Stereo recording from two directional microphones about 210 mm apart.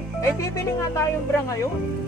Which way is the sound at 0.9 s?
15° left (ahead or behind).